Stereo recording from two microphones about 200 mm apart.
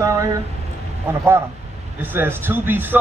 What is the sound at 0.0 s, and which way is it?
Speech, 15° right (ahead or behind).